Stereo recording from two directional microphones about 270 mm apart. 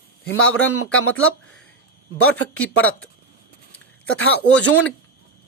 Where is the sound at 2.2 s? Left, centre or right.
Left.